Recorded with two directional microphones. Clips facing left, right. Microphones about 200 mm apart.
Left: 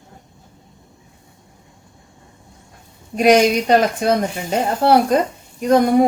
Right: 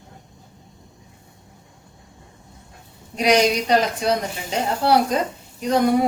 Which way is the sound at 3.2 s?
50° left (ahead or behind).